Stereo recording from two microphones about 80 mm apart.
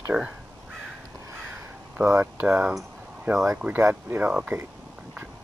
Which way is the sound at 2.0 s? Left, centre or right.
Right.